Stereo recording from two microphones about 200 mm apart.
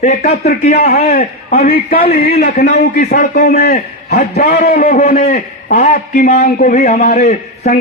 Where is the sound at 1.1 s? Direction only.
50° left (ahead or behind).